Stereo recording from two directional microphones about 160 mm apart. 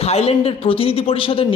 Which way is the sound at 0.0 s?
40° left (ahead or behind).